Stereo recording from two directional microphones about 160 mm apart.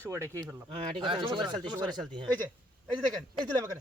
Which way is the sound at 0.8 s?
30° right (ahead or behind).